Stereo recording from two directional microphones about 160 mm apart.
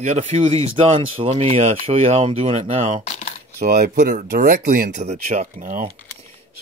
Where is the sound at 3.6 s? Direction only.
70° right (ahead or behind).